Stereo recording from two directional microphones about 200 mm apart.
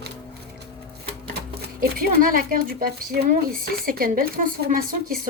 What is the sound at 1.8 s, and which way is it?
Speech, 45° right (ahead or behind).